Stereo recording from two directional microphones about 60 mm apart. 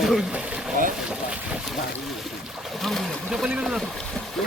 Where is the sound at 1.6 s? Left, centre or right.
Centre.